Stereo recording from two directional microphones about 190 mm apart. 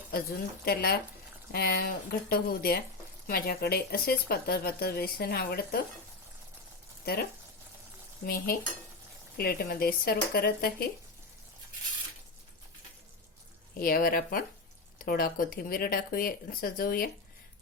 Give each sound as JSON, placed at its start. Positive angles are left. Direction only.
{"t": 0.1, "sound": "speech", "side_deg": 50}
{"t": 7.0, "sound": "speech", "side_deg": 55}
{"t": 9.4, "sound": "speech", "side_deg": 50}
{"t": 13.7, "sound": "speech", "side_deg": 50}